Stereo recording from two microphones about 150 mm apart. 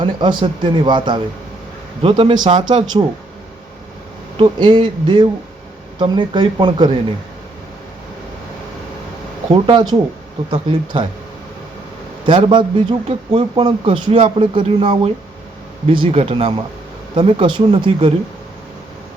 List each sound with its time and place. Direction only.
0.0 s a man's voice: 30° right (ahead or behind)
4.4 s a man's voice: 30° right (ahead or behind)
9.5 s a man's voice: 30° right (ahead or behind)
12.2 s a man's voice: 35° right (ahead or behind)